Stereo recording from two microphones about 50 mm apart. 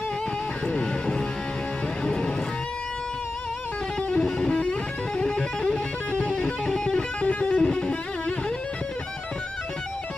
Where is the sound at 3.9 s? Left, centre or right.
Centre.